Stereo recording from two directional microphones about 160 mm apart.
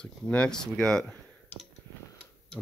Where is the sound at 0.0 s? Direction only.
5° left (ahead or behind).